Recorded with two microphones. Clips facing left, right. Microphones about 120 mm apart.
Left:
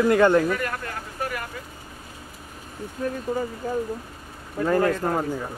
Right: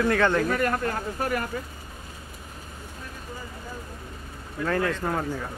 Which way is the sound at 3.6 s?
65° left (ahead or behind).